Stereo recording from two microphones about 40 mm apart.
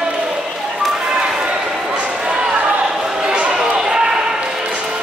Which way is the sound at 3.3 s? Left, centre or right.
Right.